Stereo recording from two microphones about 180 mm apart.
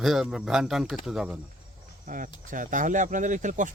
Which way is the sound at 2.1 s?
45° right (ahead or behind).